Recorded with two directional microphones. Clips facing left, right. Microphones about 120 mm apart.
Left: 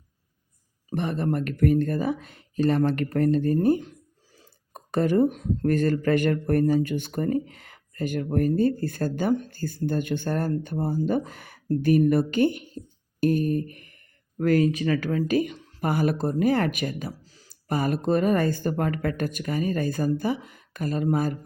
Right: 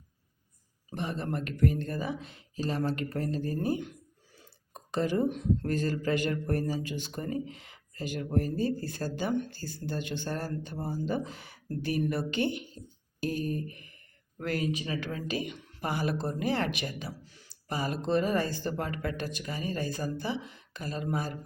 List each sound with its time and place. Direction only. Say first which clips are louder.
0.9 s speech: left 8 dB; 55° left (ahead or behind)
14.3 s speech: left 10 dB; 40° left (ahead or behind)
17.7 s speech: left 6 dB; 55° left (ahead or behind)